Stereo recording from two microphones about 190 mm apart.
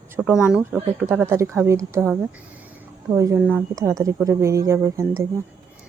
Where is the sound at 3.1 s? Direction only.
15° right (ahead or behind).